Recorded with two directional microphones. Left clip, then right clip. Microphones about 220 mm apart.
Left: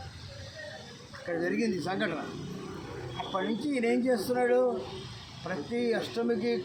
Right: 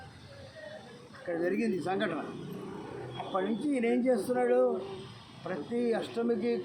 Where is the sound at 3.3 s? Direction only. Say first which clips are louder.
Even; 10° left (ahead or behind).